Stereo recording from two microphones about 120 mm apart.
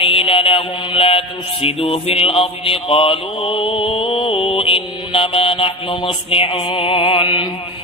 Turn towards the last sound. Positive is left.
turn(degrees=50)  # may be behind; listen again after turning